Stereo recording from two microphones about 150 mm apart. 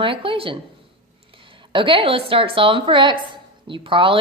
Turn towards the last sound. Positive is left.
turn(degrees=-35)  # may be behind; listen again after turning